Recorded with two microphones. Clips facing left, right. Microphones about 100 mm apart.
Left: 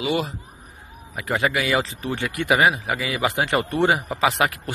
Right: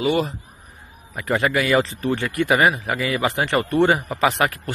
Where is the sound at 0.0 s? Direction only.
Centre (ahead or behind).